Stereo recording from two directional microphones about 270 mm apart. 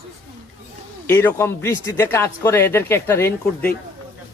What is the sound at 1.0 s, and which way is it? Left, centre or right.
Speech, centre.